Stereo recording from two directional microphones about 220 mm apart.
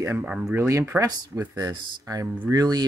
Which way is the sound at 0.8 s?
10° right (ahead or behind).